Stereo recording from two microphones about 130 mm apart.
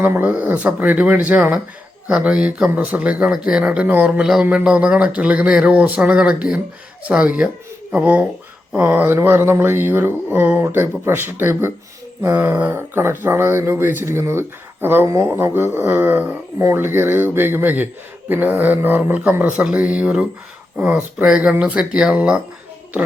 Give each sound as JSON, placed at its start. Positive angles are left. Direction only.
{"t": 0.0, "sound": "speech", "side_deg": -15}